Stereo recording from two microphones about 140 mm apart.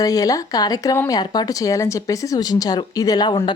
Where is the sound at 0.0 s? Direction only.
25° left (ahead or behind).